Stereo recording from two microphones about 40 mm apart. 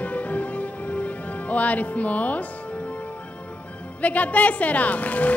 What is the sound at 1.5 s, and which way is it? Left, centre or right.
Music, left.